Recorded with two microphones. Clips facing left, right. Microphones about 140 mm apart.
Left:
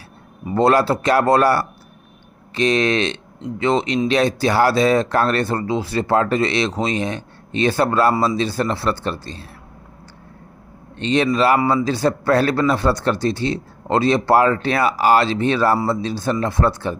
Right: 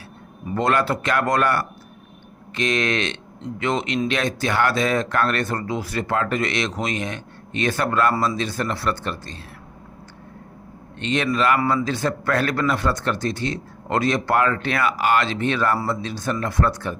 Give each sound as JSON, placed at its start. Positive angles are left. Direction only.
{"t": 0.5, "sound": "a man's voice", "side_deg": 35}
{"t": 11.0, "sound": "a man's voice", "side_deg": 30}